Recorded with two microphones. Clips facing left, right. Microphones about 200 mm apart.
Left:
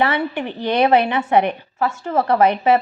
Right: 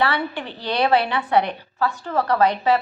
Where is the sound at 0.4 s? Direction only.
10° left (ahead or behind).